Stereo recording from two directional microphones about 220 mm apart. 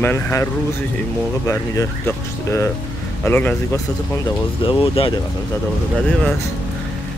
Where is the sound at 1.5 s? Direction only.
15° left (ahead or behind).